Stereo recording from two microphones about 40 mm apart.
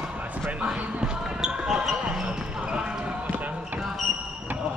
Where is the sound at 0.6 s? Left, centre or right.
Right.